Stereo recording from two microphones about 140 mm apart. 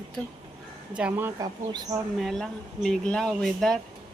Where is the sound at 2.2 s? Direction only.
Centre (ahead or behind).